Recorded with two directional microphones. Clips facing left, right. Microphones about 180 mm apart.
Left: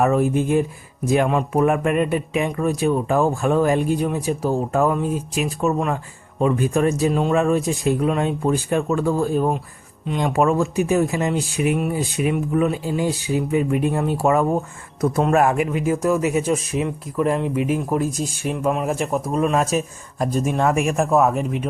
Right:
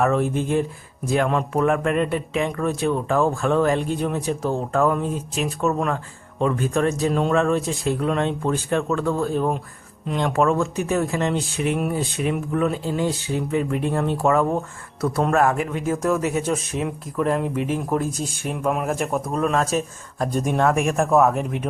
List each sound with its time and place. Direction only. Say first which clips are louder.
0.0 s speech: left 3 dB; 15° left (ahead or behind)
6.4 s speech: left 2 dB; 15° left (ahead or behind)
7.1 s speech: left 1 dB; centre (ahead or behind)
7.3 s speech: left 2 dB; 15° left (ahead or behind)